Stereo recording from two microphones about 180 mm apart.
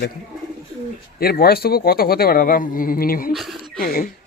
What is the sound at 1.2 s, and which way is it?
Speech, 55° left (ahead or behind).